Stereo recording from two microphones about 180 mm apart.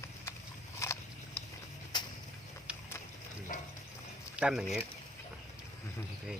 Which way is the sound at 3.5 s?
45° left (ahead or behind).